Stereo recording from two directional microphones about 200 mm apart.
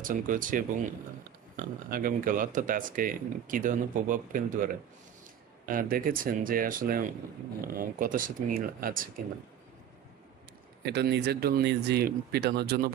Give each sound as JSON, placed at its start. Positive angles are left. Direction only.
{"t": 0.0, "sound": "speech", "side_deg": -40}
{"t": 1.9, "sound": "speech", "side_deg": -45}
{"t": 5.7, "sound": "speech", "side_deg": -45}
{"t": 10.9, "sound": "speech", "side_deg": -55}